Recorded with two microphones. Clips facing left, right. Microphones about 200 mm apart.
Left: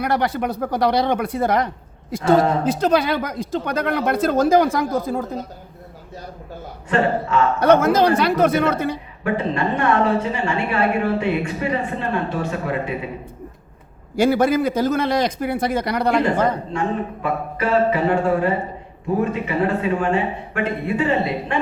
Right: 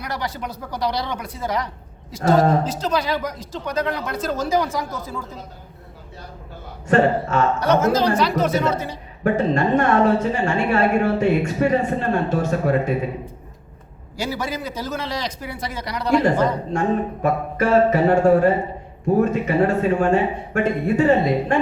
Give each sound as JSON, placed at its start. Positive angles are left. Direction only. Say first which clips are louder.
{"t": 0.0, "sound": "speech", "louder": "left 8 dB", "side_deg": 60}
{"t": 6.8, "sound": "a woman's voice", "louder": "right 3 dB", "side_deg": -45}
{"t": 7.6, "sound": "speech", "louder": "left 5 dB", "side_deg": 55}
{"t": 9.2, "sound": "a woman's voice", "louder": "right 3 dB", "side_deg": -45}
{"t": 14.2, "sound": "speech", "louder": "left 10 dB", "side_deg": 55}
{"t": 17.2, "sound": "a woman's voice", "louder": "right 3 dB", "side_deg": -45}